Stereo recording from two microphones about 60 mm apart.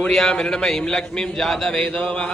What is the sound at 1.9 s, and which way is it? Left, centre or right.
Speech, centre.